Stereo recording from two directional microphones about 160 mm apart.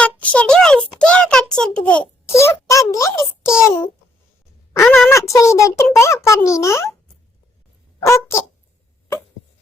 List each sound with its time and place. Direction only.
0.0 s a sound: 10° left (ahead or behind)
3.6 s a child's voice: 15° left (ahead or behind)
7.9 s speech: 15° left (ahead or behind)